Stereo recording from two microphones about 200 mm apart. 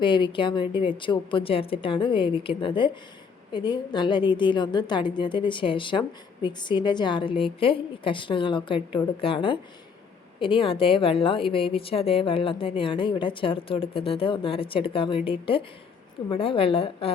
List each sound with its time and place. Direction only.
0.0 s a woman's voice: 25° left (ahead or behind)